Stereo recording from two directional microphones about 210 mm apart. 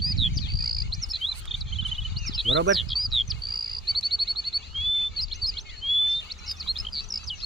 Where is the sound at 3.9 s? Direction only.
Centre (ahead or behind).